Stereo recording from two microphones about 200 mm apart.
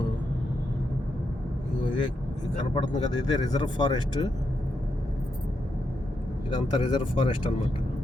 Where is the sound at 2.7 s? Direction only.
25° left (ahead or behind).